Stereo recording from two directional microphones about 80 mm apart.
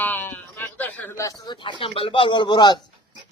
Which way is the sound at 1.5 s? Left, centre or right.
Left.